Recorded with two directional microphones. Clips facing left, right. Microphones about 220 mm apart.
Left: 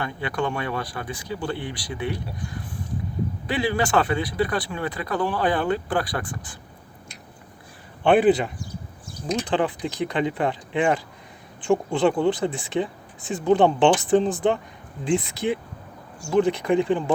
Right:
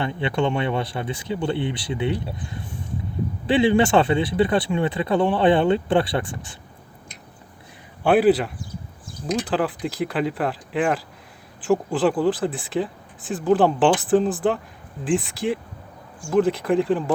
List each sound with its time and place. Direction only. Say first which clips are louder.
0.0 s speech: right 4 dB; 25° right (ahead or behind)
8.0 s speech: right 1 dB; 5° right (ahead or behind)